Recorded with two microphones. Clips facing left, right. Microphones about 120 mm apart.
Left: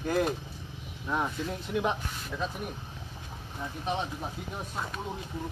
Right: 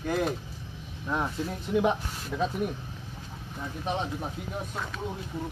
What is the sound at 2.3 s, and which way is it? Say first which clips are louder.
Speech: right 5 dB; 15° right (ahead or behind).